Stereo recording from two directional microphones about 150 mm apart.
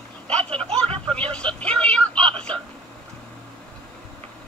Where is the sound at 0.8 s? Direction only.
40° right (ahead or behind).